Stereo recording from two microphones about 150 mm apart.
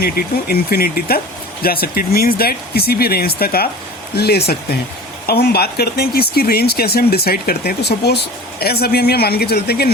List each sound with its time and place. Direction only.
0.0 s speech: 90° left